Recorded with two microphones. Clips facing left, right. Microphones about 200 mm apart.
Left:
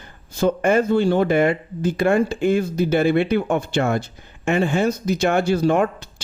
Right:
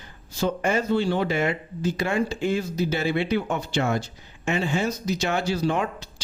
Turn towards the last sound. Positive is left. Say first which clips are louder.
# left 7 dB
turn(degrees=55)  # may be behind; listen again after turning